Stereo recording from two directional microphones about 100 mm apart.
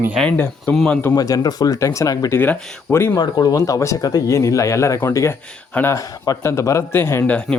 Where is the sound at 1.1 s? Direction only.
40° left (ahead or behind).